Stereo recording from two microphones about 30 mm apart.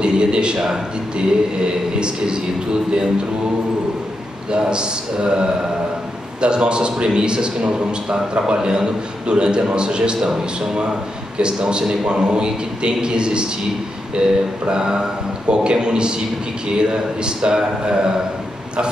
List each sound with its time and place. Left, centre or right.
0.0 s a man's voice: right
4.5 s a man's voice: right
11.3 s a man's voice: right